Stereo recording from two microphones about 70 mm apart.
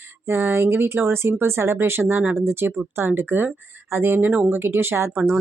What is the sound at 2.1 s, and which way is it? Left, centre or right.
Speech, right.